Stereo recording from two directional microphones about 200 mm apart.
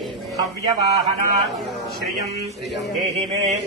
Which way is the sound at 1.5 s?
Centre (ahead or behind).